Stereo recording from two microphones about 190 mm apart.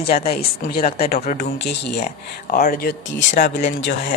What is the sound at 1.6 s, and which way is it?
Speech, 60° left (ahead or behind).